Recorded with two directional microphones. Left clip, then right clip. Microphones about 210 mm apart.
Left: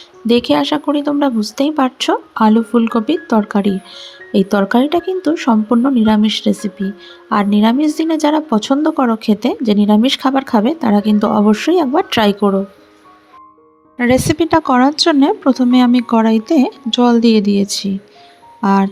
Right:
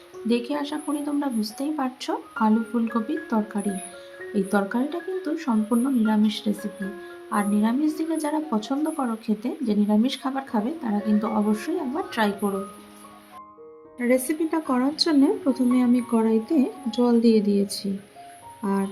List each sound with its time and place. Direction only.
0.3 s speech: 40° left (ahead or behind)
14.0 s speech: 40° left (ahead or behind)